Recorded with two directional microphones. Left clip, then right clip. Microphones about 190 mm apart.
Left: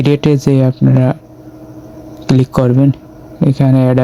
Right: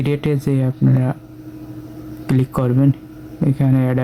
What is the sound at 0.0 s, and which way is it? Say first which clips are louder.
Speech: left 8 dB; 30° left (ahead or behind).